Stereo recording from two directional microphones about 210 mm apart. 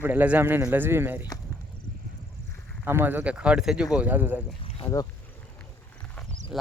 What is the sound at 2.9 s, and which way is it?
Speech, 10° right (ahead or behind).